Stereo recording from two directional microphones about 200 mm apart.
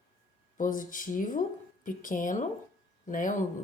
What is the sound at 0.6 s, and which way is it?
Speech, 40° left (ahead or behind).